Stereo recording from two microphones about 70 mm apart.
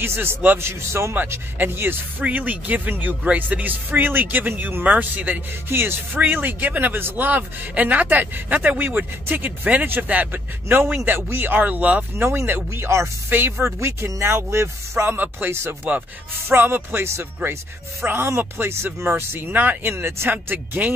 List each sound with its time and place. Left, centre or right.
0.0 s speech: right
12.3 s speech: right
13.7 s speech: right
15.9 s speech: right